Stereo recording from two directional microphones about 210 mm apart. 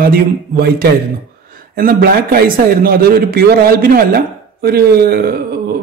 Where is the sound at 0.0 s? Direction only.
45° right (ahead or behind).